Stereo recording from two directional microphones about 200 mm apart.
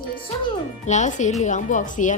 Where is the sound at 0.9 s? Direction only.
35° left (ahead or behind).